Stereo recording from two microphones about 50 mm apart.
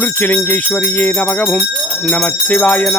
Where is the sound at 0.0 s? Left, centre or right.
Left.